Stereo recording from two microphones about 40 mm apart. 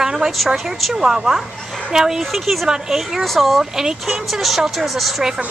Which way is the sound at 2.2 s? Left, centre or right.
Centre.